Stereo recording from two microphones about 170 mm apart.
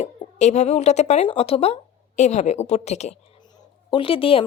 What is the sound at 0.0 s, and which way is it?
A woman's voice, 40° left (ahead or behind).